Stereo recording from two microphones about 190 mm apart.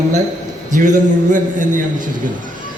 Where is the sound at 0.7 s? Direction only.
45° right (ahead or behind).